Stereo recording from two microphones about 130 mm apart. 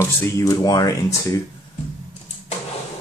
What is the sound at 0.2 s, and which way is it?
Speech, 25° left (ahead or behind).